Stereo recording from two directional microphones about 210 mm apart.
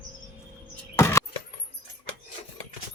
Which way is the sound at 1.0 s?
10° left (ahead or behind).